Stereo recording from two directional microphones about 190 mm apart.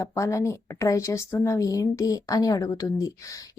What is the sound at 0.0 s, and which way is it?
Speech, 15° left (ahead or behind).